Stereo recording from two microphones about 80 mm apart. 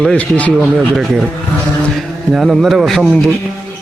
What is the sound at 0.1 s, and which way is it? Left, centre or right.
Speech, centre.